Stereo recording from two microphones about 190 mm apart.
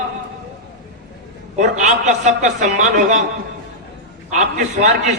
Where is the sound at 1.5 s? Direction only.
40° right (ahead or behind).